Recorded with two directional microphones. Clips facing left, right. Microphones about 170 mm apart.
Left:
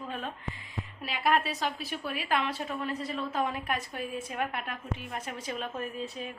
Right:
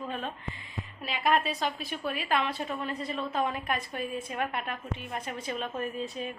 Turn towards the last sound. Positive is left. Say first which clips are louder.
# right 2 dB
turn(degrees=0)  # may be behind; listen again after turning